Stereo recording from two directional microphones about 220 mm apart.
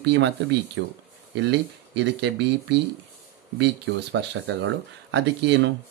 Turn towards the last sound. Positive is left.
turn(degrees=-55)  # may be behind; listen again after turning